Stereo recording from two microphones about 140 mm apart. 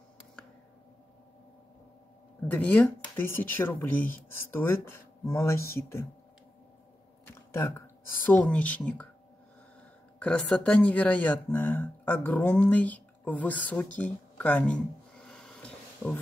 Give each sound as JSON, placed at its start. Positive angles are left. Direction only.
{"t": 2.4, "sound": "speech", "side_deg": 10}
{"t": 7.5, "sound": "speech", "side_deg": 20}
{"t": 10.1, "sound": "speech", "side_deg": 10}